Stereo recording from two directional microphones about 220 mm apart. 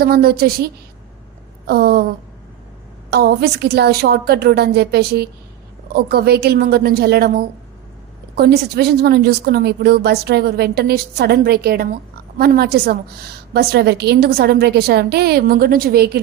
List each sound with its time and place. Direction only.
0.0 s a woman's voice: 45° right (ahead or behind)
3.1 s a woman's voice: 45° right (ahead or behind)